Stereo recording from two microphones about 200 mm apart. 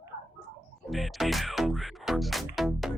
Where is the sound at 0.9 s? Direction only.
Centre (ahead or behind).